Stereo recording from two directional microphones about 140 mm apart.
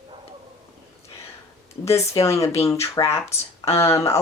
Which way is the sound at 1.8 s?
20° left (ahead or behind).